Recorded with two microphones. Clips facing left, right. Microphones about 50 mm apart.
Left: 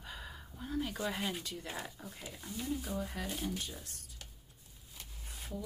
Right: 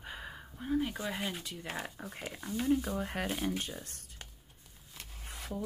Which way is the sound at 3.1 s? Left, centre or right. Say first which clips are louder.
Right 5 dB; right.